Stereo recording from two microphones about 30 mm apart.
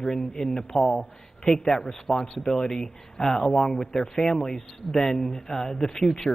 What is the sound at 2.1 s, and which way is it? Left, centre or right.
Speech, centre.